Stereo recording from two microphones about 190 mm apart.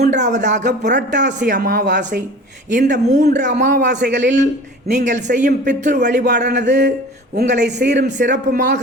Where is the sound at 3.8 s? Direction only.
65° right (ahead or behind).